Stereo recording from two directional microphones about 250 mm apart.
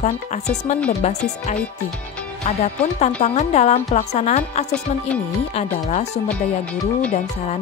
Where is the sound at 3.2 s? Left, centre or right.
Left.